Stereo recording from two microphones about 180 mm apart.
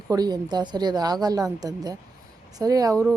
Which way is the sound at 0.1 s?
20° right (ahead or behind).